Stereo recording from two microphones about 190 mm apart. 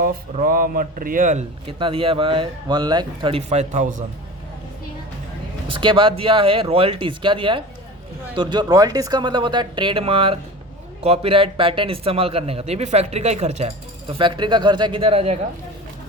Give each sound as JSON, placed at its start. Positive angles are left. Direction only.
{"t": 0.0, "sound": "a man's voice", "side_deg": -45}
{"t": 5.6, "sound": "a man's voice", "side_deg": -25}